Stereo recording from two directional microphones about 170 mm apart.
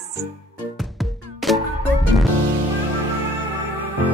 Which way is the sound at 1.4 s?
Centre (ahead or behind).